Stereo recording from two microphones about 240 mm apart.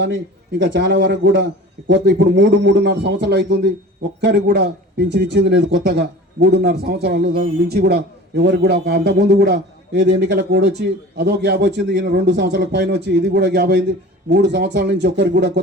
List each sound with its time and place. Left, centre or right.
0.6 s a man's voice: right